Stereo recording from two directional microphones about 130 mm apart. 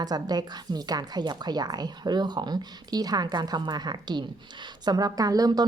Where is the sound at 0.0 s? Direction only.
30° right (ahead or behind).